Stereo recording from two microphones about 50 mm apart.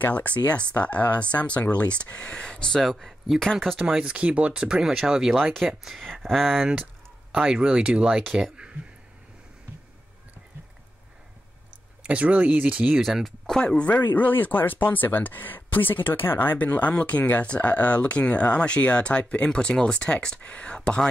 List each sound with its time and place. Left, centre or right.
0.0 s speech: left
2.8 s speech: centre
3.8 s speech: centre
5.3 s speech: centre
5.7 s speech: centre
6.2 s speech: centre
7.4 s speech: centre
12.0 s speech: right
12.9 s speech: centre
13.7 s speech: left
14.0 s speech: left
16.5 s speech: left